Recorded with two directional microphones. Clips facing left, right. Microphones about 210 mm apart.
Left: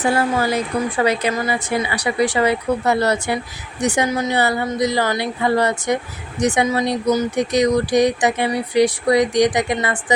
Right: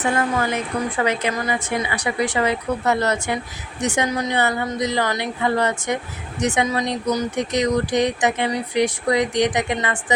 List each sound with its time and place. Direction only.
0.0 s speech: 30° left (ahead or behind)